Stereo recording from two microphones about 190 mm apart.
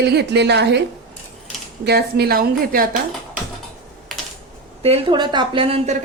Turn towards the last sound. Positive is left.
turn(degrees=-30)  # may be behind; listen again after turning